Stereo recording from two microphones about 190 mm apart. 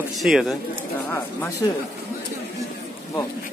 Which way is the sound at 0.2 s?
Centre (ahead or behind).